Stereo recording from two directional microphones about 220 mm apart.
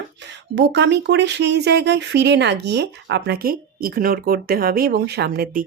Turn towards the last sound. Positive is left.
turn(degrees=-40)  # may be behind; listen again after turning